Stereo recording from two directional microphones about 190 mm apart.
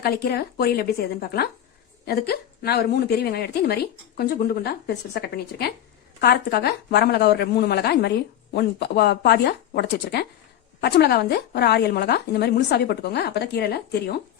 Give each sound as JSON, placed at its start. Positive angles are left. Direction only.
{"t": 0.0, "sound": "a woman's voice", "side_deg": 55}